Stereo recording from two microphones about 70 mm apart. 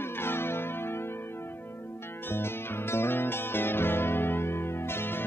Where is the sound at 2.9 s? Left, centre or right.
Left.